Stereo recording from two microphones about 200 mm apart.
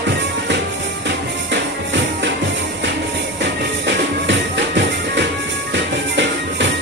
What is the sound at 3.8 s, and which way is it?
Music, 60° right (ahead or behind).